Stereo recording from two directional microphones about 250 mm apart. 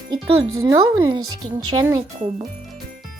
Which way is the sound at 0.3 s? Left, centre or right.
Right.